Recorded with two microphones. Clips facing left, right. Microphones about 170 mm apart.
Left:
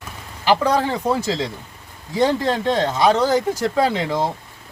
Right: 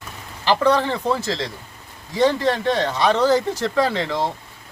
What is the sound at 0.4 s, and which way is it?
Speech, 10° left (ahead or behind).